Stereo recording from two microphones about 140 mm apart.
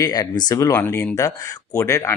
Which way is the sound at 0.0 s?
30° left (ahead or behind).